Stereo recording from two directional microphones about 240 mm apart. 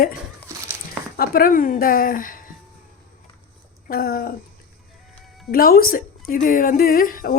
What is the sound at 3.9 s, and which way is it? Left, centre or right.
Speech, left.